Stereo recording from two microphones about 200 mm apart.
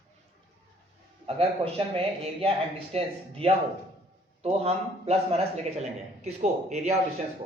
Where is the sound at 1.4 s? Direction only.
30° right (ahead or behind).